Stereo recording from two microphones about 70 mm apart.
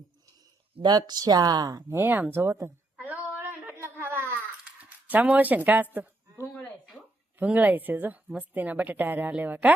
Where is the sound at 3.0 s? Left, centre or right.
Right.